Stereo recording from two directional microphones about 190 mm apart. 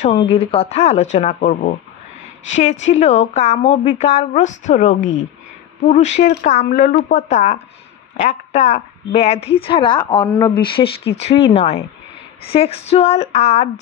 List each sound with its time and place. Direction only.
0.0 s a woman's voice: 35° left (ahead or behind)